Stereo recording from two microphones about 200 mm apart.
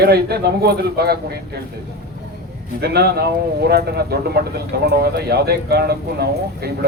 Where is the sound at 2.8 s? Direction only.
55° right (ahead or behind).